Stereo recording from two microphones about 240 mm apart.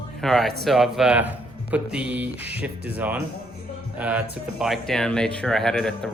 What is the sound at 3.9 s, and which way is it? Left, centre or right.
Music, centre.